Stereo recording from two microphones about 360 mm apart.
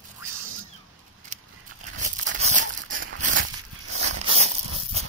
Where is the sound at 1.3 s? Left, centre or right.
Centre.